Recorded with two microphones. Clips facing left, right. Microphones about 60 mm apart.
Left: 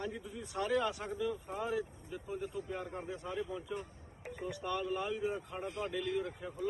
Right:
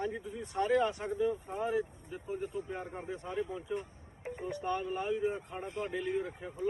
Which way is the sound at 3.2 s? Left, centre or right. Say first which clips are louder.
Right 4 dB; right.